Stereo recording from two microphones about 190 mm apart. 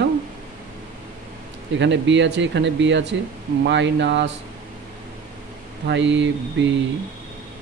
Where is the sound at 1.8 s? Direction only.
70° right (ahead or behind).